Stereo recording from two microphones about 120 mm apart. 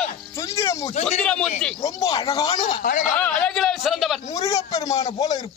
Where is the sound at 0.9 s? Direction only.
65° left (ahead or behind).